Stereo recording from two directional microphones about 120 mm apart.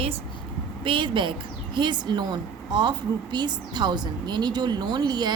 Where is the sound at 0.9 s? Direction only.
45° right (ahead or behind).